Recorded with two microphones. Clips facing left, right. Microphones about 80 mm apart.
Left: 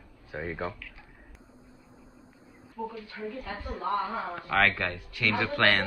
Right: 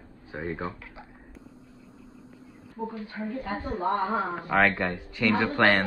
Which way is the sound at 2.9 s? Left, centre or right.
Right.